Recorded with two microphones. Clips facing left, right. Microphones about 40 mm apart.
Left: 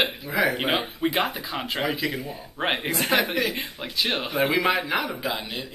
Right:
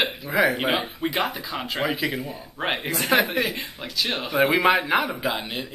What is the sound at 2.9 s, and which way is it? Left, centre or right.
Speech, centre.